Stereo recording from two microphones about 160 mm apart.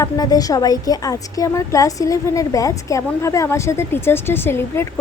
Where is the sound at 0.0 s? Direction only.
25° left (ahead or behind).